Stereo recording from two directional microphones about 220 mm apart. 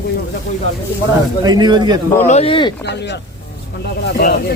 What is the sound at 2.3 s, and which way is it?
Speech, 25° left (ahead or behind).